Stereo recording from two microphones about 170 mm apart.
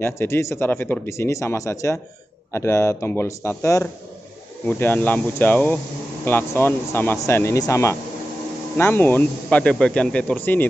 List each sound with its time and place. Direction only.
0.0 s a man's voice: 15° left (ahead or behind)